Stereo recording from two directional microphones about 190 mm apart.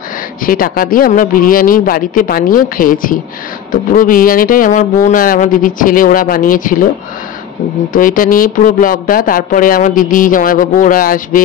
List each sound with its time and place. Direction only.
0.5 s speech: 50° left (ahead or behind)
7.9 s speech: 45° left (ahead or behind)